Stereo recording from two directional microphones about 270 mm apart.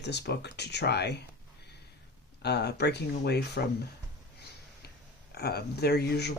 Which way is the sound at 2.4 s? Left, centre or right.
Left.